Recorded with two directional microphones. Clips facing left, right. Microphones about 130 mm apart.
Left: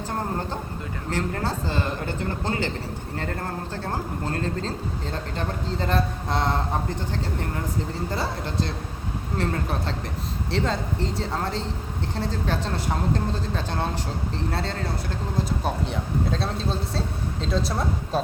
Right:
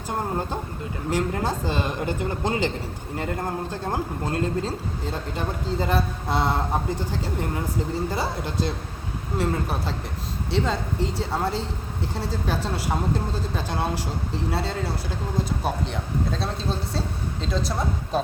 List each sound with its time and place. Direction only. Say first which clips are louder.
1.1 s speech: right 2 dB; 15° right (ahead or behind)
8.1 s speech: right 1 dB; 10° right (ahead or behind)